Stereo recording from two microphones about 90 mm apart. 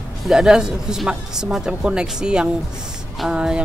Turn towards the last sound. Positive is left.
turn(degrees=-10)  # may be behind; listen again after turning